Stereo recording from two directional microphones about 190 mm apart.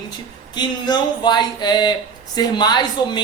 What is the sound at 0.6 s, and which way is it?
A man's voice, 20° left (ahead or behind).